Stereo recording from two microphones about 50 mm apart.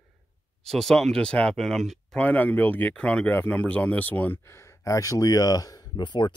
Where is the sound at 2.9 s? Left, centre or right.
Left.